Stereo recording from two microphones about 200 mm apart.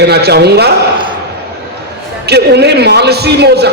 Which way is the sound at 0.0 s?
55° right (ahead or behind).